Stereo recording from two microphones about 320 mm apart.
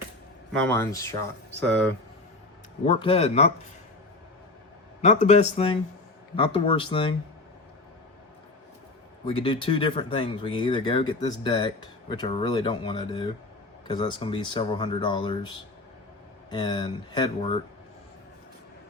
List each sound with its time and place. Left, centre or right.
0.6 s speech: centre
2.8 s a man's voice: centre
5.0 s a man's voice: left
9.2 s speech: centre